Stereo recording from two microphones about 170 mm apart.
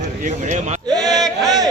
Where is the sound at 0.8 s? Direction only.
25° right (ahead or behind).